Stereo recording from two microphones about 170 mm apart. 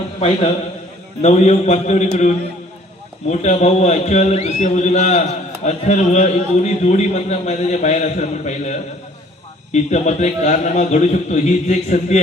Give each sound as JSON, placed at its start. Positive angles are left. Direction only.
{"t": 1.2, "sound": "a man's voice", "side_deg": 40}